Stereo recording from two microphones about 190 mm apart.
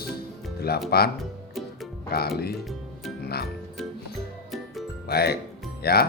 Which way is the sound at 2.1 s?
55° left (ahead or behind).